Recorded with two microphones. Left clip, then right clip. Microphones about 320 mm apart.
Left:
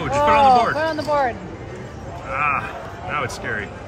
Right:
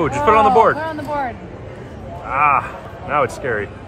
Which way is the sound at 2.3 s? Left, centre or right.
Centre.